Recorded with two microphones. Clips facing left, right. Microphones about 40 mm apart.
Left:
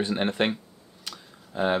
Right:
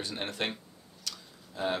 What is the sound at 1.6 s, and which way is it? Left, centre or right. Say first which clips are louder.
Speech: left 7 dB; left.